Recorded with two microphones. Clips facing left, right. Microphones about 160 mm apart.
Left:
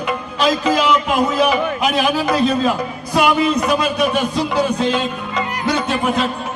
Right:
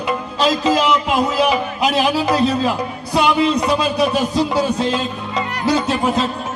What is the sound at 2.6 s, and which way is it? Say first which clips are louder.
A man's voice: left 1 dB; 25° right (ahead or behind).